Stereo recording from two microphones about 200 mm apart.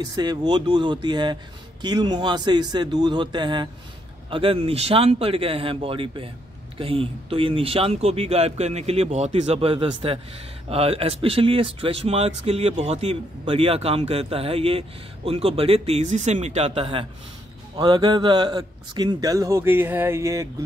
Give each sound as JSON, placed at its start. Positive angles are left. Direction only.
{"t": 0.0, "sound": "speech", "side_deg": -20}